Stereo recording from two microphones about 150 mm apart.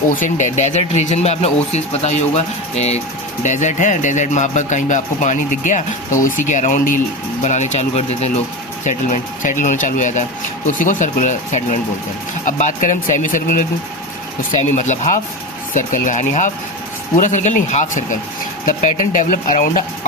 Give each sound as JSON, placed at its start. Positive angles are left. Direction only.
{"t": 0.1, "sound": "speech", "side_deg": 60}
{"t": 8.8, "sound": "speech", "side_deg": 60}
{"t": 14.6, "sound": "speech", "side_deg": 50}